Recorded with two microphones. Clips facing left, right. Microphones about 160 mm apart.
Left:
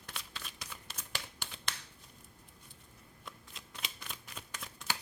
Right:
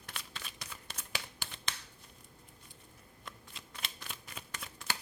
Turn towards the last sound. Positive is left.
turn(degrees=0)  # may be behind; listen again after turning